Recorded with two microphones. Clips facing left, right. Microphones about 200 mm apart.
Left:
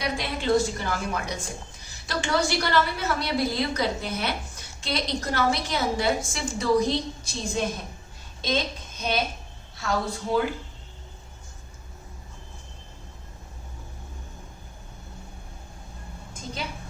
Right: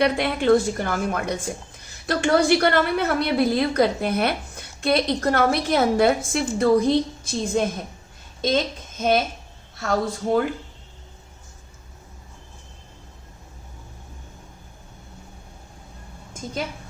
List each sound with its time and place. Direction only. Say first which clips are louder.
0.0 s a woman's voice: right 8 dB; 60° right (ahead or behind)